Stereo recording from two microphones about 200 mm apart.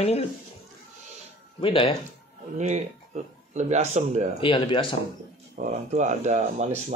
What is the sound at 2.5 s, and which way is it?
Speech, 35° right (ahead or behind).